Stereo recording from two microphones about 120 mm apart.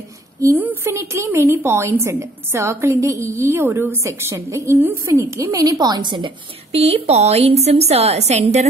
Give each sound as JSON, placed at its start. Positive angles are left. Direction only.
{"t": 0.4, "sound": "a woman's voice", "side_deg": -20}
{"t": 6.7, "sound": "a woman's voice", "side_deg": -55}